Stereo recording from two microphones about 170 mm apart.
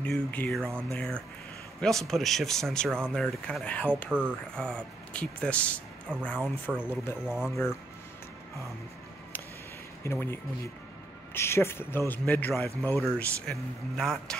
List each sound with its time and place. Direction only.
0.0 s speech: 10° left (ahead or behind)
0.7 s speech: 15° right (ahead or behind)
0.9 s speech: 5° left (ahead or behind)
4.1 s speech: 5° right (ahead or behind)
4.6 s speech: 5° left (ahead or behind)
7.2 s speech: 5° right (ahead or behind)
10.0 s speech: 15° left (ahead or behind)